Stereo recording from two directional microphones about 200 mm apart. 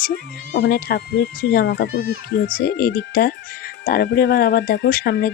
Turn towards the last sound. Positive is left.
turn(degrees=55)  # may be behind; listen again after turning